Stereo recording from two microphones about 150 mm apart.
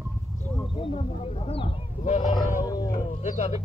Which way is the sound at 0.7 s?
40° left (ahead or behind).